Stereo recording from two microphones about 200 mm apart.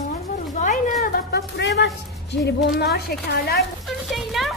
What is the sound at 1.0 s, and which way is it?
A woman's voice, 55° left (ahead or behind).